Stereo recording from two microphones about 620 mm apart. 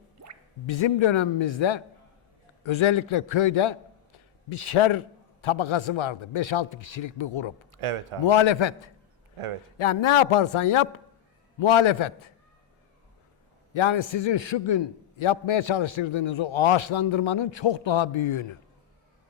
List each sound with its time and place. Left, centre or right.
0.7 s a man's voice: left
7.8 s a man's voice: right
8.3 s a man's voice: left
9.7 s a man's voice: left
13.7 s a man's voice: left